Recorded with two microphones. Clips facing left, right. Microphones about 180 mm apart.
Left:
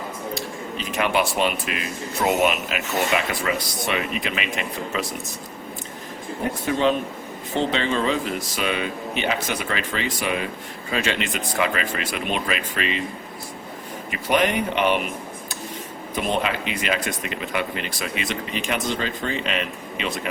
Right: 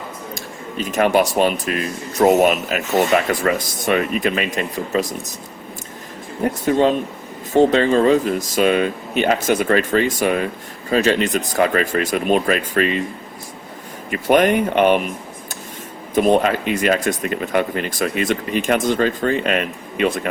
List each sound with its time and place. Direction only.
0.3 s speech: 45° right (ahead or behind)
6.7 s speech: 45° right (ahead or behind)
14.1 s speech: 45° right (ahead or behind)
16.1 s speech: 45° right (ahead or behind)